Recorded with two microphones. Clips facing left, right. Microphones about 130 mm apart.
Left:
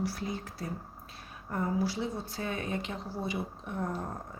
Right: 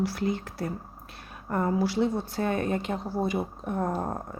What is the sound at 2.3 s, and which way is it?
Speech, 55° right (ahead or behind).